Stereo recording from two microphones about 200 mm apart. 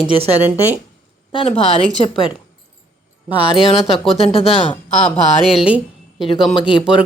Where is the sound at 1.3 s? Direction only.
30° left (ahead or behind).